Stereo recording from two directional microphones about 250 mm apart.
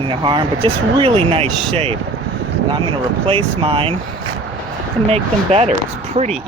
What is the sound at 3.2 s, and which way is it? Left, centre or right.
Speech, right.